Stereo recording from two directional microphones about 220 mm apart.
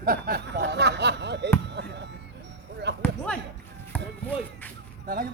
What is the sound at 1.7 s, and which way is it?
Chop, 50° right (ahead or behind).